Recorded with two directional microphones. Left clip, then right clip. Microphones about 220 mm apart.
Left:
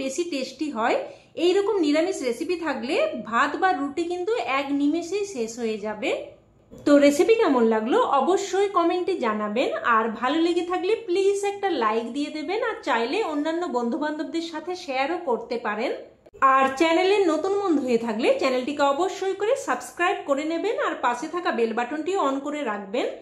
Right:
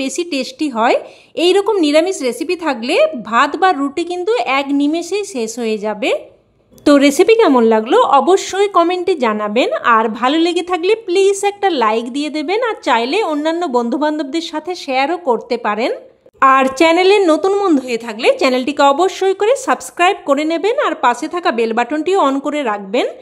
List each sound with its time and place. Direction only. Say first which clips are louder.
0.0 s speech: right 8 dB; 45° right (ahead or behind)